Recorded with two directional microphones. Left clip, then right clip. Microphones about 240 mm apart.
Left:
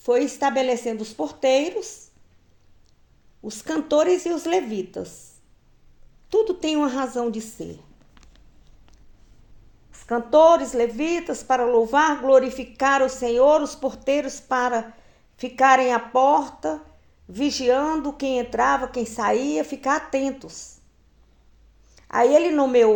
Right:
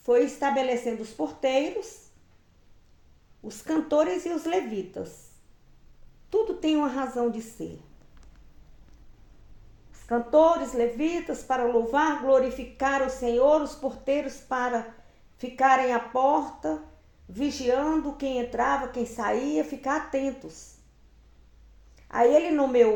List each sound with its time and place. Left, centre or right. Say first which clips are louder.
0.0 s a woman's voice: left 2 dB; left
3.4 s a woman's voice: left 2 dB; left
6.3 s a woman's voice: left 4 dB; left
9.9 s a woman's voice: left 4 dB; left
21.9 s a woman's voice: left 4 dB; left